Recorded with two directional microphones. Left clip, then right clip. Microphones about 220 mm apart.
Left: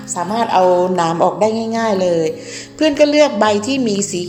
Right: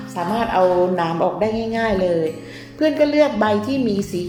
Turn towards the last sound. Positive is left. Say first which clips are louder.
# left 3 dB
turn(degrees=25)  # may be behind; listen again after turning